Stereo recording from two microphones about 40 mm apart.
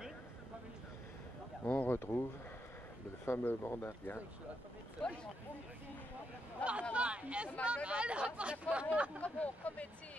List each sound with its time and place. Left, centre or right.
1.6 s a sound: left
1.9 s speech: left
3.4 s speech: left
5.0 s speech: left
6.6 s speech: right
9.2 s speech: left